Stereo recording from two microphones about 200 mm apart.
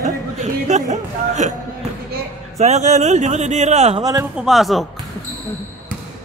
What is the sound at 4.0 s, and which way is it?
Speech, 15° right (ahead or behind).